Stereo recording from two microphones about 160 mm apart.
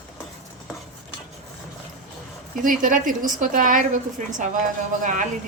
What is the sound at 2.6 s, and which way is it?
A woman's voice, 60° right (ahead or behind).